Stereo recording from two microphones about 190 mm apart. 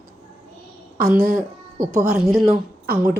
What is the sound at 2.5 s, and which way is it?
Speech, 50° right (ahead or behind).